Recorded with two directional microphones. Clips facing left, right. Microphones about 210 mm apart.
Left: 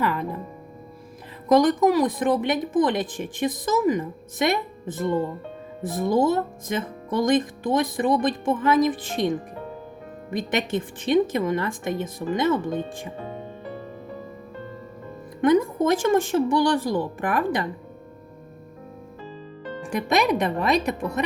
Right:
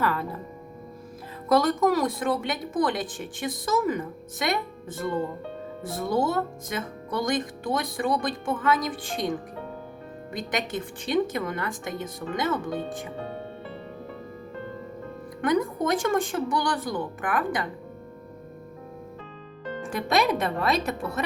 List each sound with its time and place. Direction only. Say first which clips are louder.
0.0 s speech: left 2 dB; 15° left (ahead or behind)
1.5 s speech: left 4 dB; 15° left (ahead or behind)
10.3 s speech: left 5 dB; 25° left (ahead or behind)
15.4 s speech: left 5 dB; 25° left (ahead or behind)
19.8 s speech: left 2 dB; 15° left (ahead or behind)